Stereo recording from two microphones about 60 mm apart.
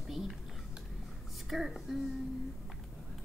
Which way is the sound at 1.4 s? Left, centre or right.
Centre.